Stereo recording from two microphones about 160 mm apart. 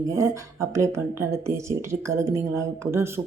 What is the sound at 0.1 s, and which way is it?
Speech, 20° right (ahead or behind).